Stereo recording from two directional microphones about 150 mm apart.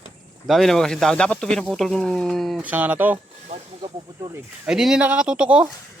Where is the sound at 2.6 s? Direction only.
10° right (ahead or behind).